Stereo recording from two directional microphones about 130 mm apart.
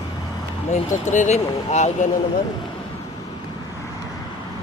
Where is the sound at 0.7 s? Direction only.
70° left (ahead or behind).